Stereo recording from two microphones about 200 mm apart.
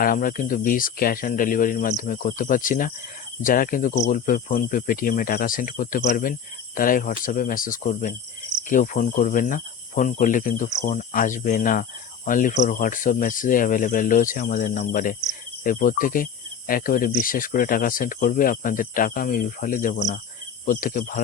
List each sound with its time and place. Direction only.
0.0 s speech: 45° left (ahead or behind)